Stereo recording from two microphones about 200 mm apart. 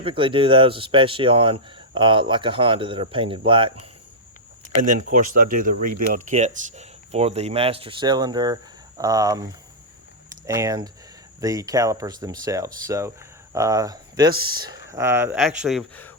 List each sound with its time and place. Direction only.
0.0 s speech: 25° right (ahead or behind)
4.8 s speech: 40° right (ahead or behind); by 15.8 s centre (ahead or behind)